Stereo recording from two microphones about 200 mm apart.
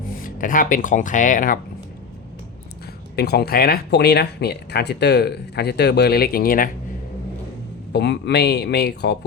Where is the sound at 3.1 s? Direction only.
50° left (ahead or behind).